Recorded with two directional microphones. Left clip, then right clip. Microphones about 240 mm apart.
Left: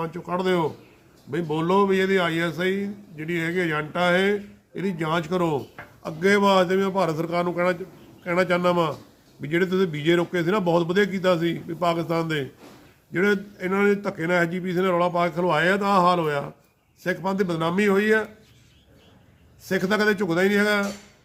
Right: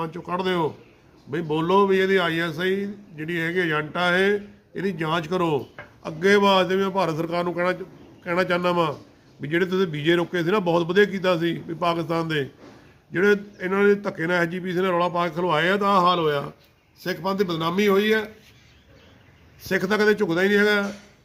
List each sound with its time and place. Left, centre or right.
0.0 s a man's voice: centre
19.6 s a man's voice: centre